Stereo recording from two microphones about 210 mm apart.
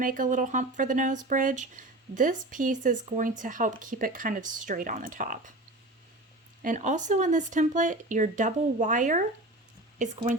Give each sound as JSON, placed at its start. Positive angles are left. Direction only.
{"t": 0.0, "sound": "speech", "side_deg": -40}
{"t": 6.6, "sound": "speech", "side_deg": -40}